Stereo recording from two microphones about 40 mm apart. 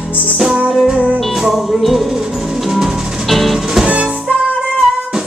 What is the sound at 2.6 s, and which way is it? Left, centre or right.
Percussion, centre.